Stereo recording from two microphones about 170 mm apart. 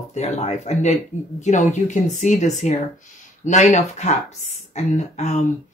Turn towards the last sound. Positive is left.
turn(degrees=45)  # may be behind; listen again after turning